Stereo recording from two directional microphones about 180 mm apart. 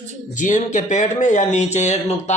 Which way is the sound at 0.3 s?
45° left (ahead or behind).